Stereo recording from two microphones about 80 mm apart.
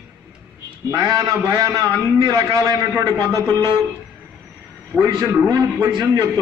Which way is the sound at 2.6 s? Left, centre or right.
Right.